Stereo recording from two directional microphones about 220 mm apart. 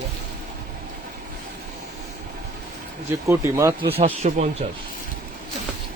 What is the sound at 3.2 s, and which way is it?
Speech, 10° right (ahead or behind).